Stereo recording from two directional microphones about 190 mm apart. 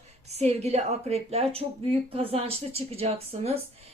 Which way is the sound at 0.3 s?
35° right (ahead or behind).